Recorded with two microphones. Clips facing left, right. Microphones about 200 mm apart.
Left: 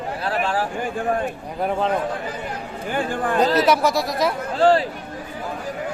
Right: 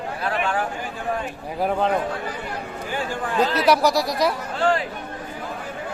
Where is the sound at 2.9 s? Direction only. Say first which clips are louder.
Left 4 dB; 55° left (ahead or behind).